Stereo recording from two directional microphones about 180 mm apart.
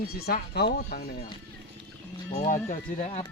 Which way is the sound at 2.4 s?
45° left (ahead or behind).